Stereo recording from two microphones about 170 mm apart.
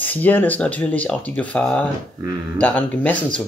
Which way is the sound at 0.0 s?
10° left (ahead or behind).